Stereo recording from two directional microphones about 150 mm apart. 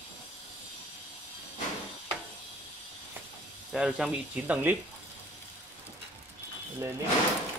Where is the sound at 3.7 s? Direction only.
5° right (ahead or behind).